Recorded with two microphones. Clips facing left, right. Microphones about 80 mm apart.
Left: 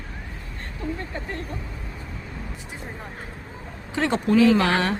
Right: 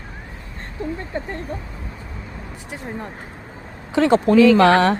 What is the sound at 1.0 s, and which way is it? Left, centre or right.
Speech, right.